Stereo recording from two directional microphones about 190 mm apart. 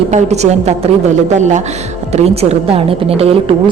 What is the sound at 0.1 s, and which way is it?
Speech, 35° right (ahead or behind).